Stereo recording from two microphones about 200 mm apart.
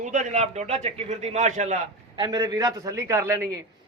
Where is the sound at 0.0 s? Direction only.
40° right (ahead or behind).